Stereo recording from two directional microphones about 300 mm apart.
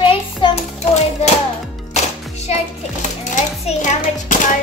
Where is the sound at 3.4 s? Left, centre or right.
Left.